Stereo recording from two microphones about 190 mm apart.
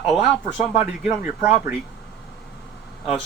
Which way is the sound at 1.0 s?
15° right (ahead or behind).